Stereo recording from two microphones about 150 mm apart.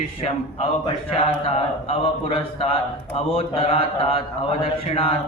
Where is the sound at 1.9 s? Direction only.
40° left (ahead or behind).